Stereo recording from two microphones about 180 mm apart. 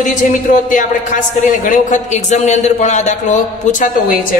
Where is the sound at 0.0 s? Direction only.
45° left (ahead or behind).